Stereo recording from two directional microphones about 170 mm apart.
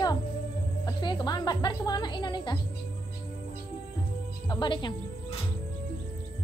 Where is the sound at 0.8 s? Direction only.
25° left (ahead or behind).